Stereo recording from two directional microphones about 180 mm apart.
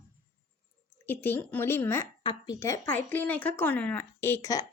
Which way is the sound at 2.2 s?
25° left (ahead or behind).